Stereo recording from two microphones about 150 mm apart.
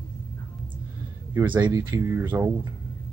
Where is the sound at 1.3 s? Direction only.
10° right (ahead or behind).